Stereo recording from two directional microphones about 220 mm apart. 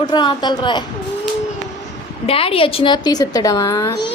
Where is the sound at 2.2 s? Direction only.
25° left (ahead or behind).